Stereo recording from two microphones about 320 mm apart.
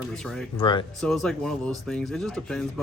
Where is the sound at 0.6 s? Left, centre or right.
Centre.